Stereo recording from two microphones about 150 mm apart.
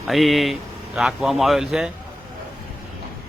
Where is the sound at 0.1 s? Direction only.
Centre (ahead or behind).